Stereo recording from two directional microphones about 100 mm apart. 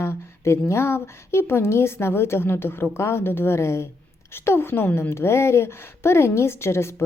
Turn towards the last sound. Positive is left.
turn(degrees=25)  # may be behind; listen again after turning